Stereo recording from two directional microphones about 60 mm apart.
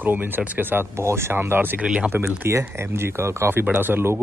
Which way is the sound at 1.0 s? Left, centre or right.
Right.